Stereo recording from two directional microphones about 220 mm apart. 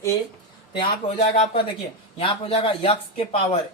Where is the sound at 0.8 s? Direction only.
30° left (ahead or behind).